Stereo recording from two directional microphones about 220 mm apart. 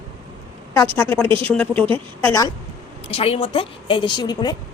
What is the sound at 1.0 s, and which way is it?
A woman's voice, 10° left (ahead or behind).